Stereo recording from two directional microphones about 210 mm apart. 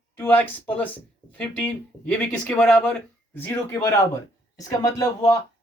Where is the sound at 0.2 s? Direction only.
10° left (ahead or behind).